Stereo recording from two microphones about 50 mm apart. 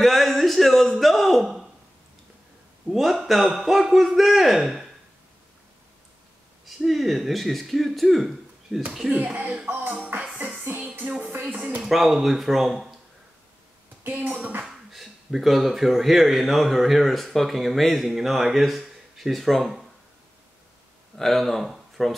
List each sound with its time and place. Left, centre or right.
0.0 s a sound: centre
2.9 s speech: centre
6.6 s speech: centre
9.1 s speech: right
9.7 s music: right
11.4 s speech: right
11.8 s speech: centre
14.0 s speech: right
14.6 s speech: centre
21.2 s speech: centre